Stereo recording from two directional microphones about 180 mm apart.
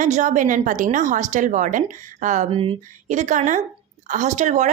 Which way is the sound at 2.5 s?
30° right (ahead or behind).